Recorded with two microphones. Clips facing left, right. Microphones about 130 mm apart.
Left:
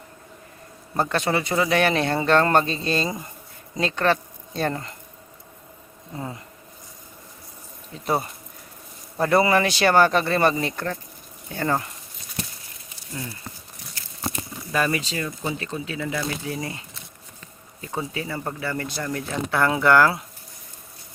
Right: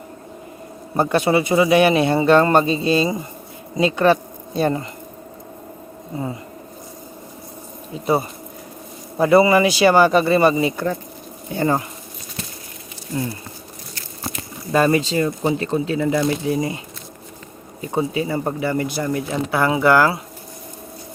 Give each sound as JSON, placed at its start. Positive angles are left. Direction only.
{"t": 0.9, "sound": "speech", "side_deg": -15}
{"t": 8.0, "sound": "speech", "side_deg": -5}
{"t": 14.7, "sound": "speech", "side_deg": -35}